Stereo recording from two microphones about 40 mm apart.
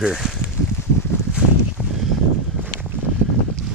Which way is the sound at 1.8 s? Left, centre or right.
Left.